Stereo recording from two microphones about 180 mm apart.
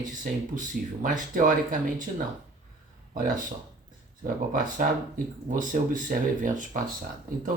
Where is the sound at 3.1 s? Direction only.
45° right (ahead or behind).